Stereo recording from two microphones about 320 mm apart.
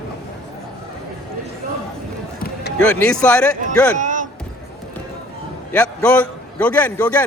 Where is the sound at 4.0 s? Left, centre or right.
Right.